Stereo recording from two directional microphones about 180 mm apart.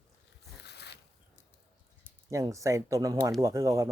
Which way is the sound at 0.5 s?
65° left (ahead or behind).